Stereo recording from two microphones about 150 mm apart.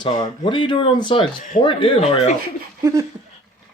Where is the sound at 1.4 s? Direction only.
60° left (ahead or behind).